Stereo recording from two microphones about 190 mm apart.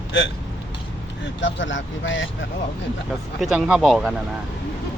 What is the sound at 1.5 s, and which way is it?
Speech, 80° left.